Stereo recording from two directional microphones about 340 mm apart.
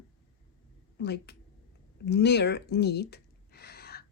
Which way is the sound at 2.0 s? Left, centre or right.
Left.